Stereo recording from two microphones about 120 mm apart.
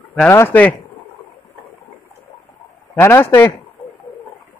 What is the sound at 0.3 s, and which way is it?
Speech, 20° left (ahead or behind).